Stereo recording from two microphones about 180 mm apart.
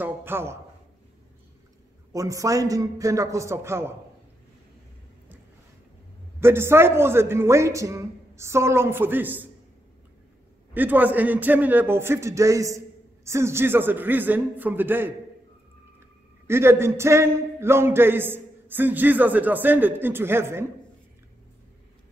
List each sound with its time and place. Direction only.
0.0 s a man's voice: 10° right (ahead or behind)
2.1 s a man's voice: 20° right (ahead or behind)
6.4 s a man's voice: 15° right (ahead or behind)
10.7 s a man's voice: 10° right (ahead or behind)
16.4 s a man's voice: 15° right (ahead or behind)